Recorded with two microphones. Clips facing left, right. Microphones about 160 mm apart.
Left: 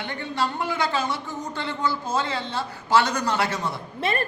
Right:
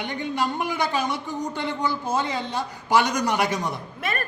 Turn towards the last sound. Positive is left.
turn(degrees=30)  # may be behind; listen again after turning